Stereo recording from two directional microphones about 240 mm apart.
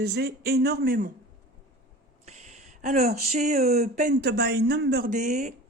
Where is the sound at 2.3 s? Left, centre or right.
Right.